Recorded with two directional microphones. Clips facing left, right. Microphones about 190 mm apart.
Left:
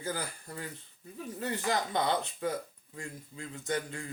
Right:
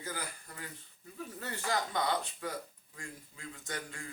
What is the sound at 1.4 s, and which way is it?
Speech, 20° left (ahead or behind).